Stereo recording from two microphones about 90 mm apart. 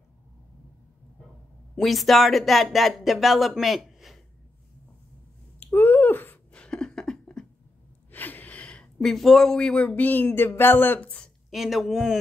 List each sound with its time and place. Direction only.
1.8 s speech: centre (ahead or behind)
5.6 s a sound: 20° left (ahead or behind)
8.1 s speech: 20° left (ahead or behind)
11.5 s speech: centre (ahead or behind)